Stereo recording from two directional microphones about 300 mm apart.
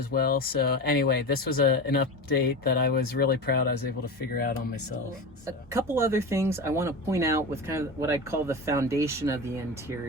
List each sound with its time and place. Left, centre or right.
0.1 s speech: left
5.5 s speech: centre